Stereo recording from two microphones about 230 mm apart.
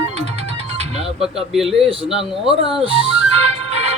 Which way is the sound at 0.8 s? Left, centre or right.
Right.